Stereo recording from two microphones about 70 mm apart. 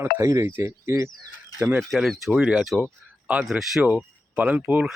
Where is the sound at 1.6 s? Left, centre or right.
Right.